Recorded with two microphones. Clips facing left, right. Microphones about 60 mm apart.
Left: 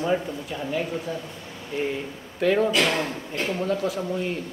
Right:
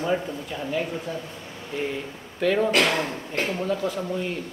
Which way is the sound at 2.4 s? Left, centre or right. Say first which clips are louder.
Left 1 dB; centre.